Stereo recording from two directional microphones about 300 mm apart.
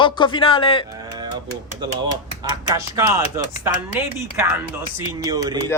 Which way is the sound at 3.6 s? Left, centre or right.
Centre.